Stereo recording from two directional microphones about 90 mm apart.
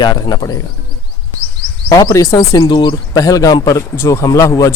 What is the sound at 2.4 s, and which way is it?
Speech, 45° left (ahead or behind).